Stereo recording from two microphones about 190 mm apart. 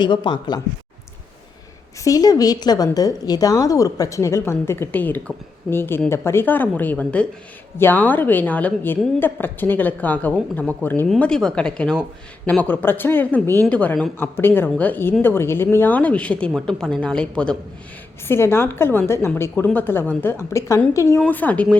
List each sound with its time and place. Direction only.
0.0 s a woman's voice: 25° left (ahead or behind)
2.0 s a woman's voice: 20° left (ahead or behind)